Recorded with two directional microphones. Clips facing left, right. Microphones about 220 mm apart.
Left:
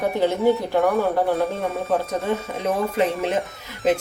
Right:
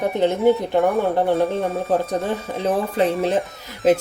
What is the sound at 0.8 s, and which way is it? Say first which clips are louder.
Speech: right 1 dB; centre (ahead or behind).